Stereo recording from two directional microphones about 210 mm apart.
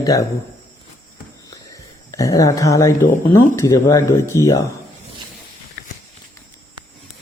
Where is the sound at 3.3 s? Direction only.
15° left (ahead or behind).